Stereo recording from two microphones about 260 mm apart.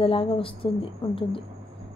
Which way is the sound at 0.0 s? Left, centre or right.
Left.